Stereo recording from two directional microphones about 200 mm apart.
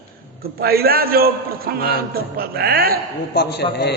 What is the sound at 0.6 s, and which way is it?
A man's voice, 50° right (ahead or behind).